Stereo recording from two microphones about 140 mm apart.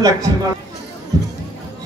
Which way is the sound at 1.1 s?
25° right (ahead or behind).